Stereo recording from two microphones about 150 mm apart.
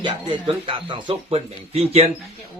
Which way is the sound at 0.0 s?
30° right (ahead or behind).